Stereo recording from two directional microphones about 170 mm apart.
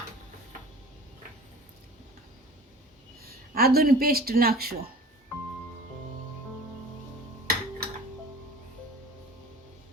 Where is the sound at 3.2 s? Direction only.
65° right (ahead or behind).